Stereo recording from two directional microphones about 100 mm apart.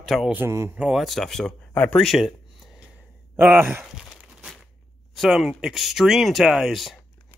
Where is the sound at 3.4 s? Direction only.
20° right (ahead or behind).